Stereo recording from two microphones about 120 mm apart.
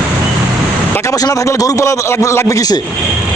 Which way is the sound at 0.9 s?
30° left (ahead or behind).